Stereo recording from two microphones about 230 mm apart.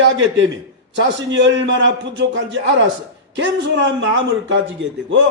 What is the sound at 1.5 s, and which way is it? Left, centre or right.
A man's voice, right.